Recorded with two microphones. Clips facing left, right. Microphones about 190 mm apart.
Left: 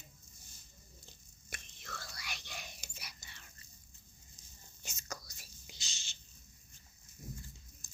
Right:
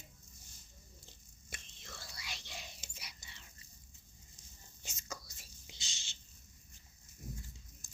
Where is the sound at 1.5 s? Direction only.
25° right (ahead or behind).